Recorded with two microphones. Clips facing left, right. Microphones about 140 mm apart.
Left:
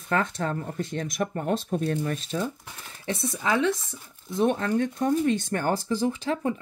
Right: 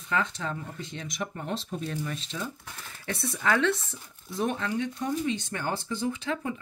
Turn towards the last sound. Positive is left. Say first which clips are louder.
# left 4 dB
turn(degrees=35)  # may be behind; listen again after turning